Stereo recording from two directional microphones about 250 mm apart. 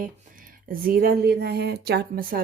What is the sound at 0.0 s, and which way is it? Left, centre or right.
Speech, right.